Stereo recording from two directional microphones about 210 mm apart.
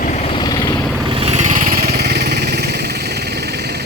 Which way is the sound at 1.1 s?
30° right (ahead or behind).